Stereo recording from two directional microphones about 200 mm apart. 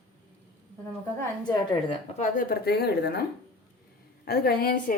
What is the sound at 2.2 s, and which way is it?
Speech, 45° left (ahead or behind).